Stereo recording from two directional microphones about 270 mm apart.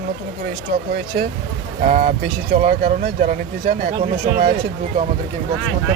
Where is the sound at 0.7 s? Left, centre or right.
Right.